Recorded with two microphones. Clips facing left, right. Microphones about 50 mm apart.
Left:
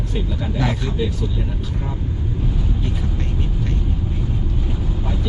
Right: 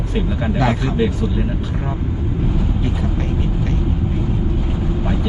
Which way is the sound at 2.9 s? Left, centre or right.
Centre.